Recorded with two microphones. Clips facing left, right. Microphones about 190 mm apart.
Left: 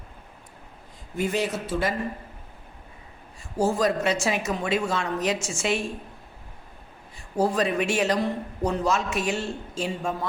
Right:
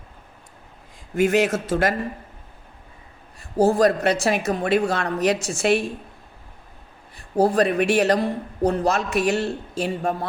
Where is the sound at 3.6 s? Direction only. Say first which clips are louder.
Right 5 dB; 60° right (ahead or behind).